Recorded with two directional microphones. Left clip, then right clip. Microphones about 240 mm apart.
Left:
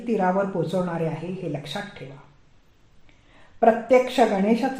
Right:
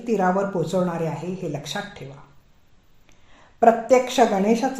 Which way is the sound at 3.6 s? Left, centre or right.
Right.